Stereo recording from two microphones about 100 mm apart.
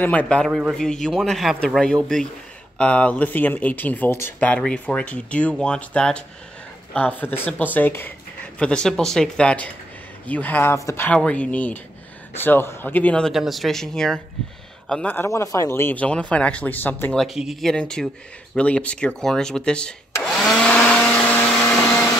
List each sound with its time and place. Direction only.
0.0 s speech: 15° left (ahead or behind)
0.5 s a man's voice: 5° right (ahead or behind)
0.7 s a man's voice: 5° left (ahead or behind)
13.3 s a man's voice: centre (ahead or behind)
15.0 s speech: 25° left (ahead or behind)
17.1 s speech: centre (ahead or behind)
21.0 s vacuum cleaner: 15° left (ahead or behind)